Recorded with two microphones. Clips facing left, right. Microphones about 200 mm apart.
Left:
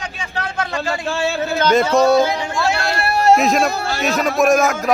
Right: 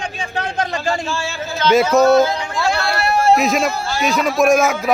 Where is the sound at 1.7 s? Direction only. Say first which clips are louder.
Right 2 dB; 5° right (ahead or behind).